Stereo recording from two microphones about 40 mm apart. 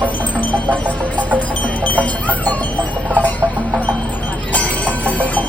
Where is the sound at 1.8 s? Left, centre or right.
Left.